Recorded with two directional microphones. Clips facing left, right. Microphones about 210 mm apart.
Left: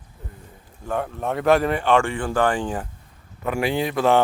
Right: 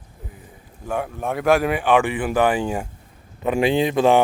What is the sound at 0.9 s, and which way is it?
Speech, 5° right (ahead or behind).